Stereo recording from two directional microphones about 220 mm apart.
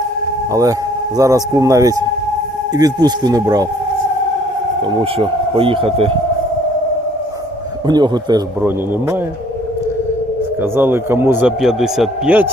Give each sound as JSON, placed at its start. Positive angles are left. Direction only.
{"t": 0.5, "sound": "a man's voice", "side_deg": -15}
{"t": 4.8, "sound": "speech", "side_deg": -25}
{"t": 7.9, "sound": "speech", "side_deg": -20}
{"t": 10.6, "sound": "a man's voice", "side_deg": -10}